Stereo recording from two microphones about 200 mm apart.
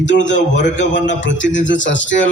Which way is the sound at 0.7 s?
60° left (ahead or behind).